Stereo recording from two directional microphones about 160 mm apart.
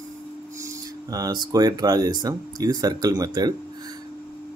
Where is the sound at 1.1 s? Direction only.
25° right (ahead or behind).